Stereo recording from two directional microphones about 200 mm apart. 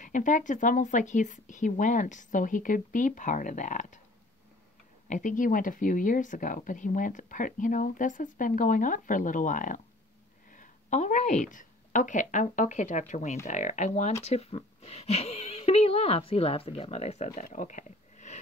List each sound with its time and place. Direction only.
0.0 s speech: 40° left (ahead or behind)
5.0 s a woman's voice: 40° left (ahead or behind)